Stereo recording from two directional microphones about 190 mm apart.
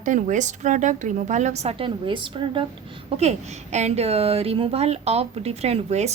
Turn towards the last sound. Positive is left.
turn(degrees=-35)  # may be behind; listen again after turning